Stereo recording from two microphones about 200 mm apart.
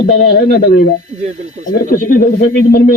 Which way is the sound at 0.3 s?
45° left (ahead or behind).